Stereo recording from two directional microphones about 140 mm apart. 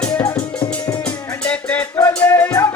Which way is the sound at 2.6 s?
25° left (ahead or behind).